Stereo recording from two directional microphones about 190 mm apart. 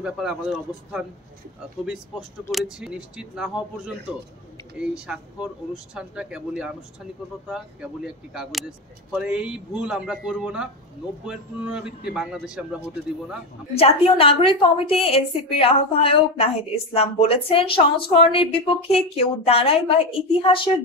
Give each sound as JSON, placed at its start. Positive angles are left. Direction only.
{"t": 0.0, "sound": "speech", "side_deg": -5}
{"t": 2.5, "sound": "speech", "side_deg": -5}
{"t": 13.7, "sound": "a woman's voice", "side_deg": 30}